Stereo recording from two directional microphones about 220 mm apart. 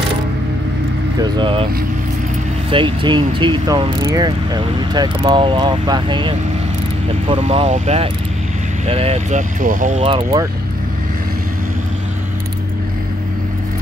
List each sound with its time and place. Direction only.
1.2 s speech: 20° right (ahead or behind)
2.7 s speech: 20° right (ahead or behind)